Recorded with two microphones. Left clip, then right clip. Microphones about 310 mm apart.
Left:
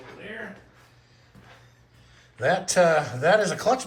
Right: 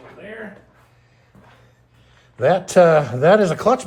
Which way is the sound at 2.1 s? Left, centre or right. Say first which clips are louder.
Right 7 dB; centre.